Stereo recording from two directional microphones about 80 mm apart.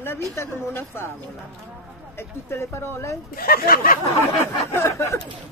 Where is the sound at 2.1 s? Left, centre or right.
Left.